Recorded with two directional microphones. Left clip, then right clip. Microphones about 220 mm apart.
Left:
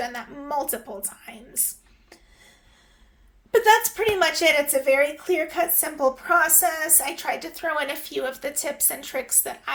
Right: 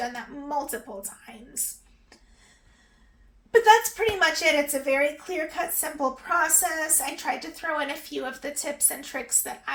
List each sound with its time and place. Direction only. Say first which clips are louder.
0.0 s a woman's voice: left 1 dB; 45° left (ahead or behind)
3.5 s a woman's voice: even; 45° left (ahead or behind)